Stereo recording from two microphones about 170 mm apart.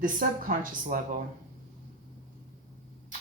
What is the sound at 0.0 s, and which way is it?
Speech, 55° right (ahead or behind).